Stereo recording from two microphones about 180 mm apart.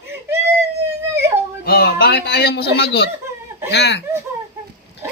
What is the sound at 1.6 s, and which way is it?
A man's voice, 60° left (ahead or behind).